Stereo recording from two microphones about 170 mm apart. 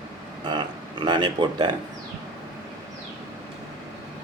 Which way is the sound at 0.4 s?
25° right (ahead or behind).